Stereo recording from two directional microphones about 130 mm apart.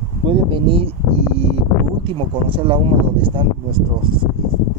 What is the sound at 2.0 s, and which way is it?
Speech, 40° right (ahead or behind).